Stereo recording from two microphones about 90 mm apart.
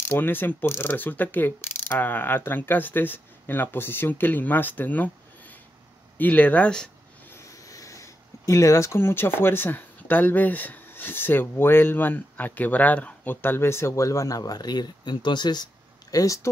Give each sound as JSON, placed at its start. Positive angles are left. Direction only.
{"t": 0.1, "sound": "mechanisms", "side_deg": 25}
{"t": 6.1, "sound": "speech", "side_deg": 15}
{"t": 7.2, "sound": "speech", "side_deg": 35}
{"t": 16.1, "sound": "speech", "side_deg": 40}